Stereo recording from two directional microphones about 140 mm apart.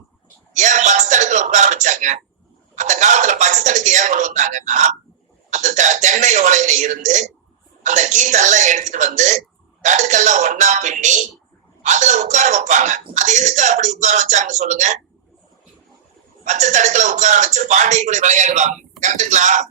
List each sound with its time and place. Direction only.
0.5 s a sound: 60° right (ahead or behind)
2.7 s speech: 60° right (ahead or behind)
16.4 s speech: 60° right (ahead or behind)